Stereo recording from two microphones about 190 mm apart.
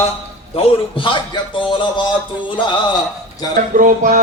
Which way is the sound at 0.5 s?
30° left (ahead or behind).